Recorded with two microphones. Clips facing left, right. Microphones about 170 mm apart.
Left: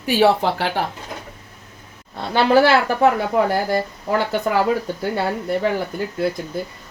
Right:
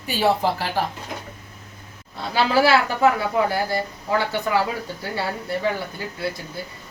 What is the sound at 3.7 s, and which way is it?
Speech, 50° left (ahead or behind).